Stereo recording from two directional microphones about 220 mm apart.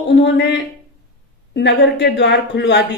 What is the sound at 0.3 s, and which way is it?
Speech, 50° left (ahead or behind).